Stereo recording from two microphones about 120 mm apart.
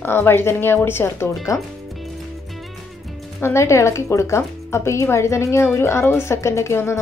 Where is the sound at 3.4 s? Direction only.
20° left (ahead or behind).